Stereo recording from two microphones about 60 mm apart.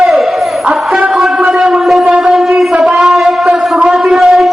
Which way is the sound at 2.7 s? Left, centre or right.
Centre.